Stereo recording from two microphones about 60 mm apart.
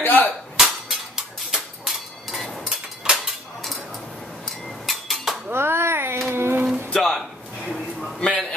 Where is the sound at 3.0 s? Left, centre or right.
Centre.